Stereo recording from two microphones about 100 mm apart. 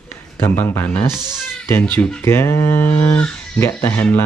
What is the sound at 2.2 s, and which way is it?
Speech, 25° left (ahead or behind).